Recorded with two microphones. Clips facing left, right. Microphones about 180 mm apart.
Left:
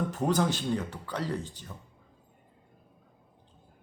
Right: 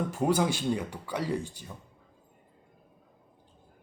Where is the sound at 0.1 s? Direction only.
10° right (ahead or behind).